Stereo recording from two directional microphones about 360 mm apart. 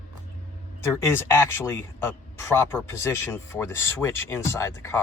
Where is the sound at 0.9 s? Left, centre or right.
Centre.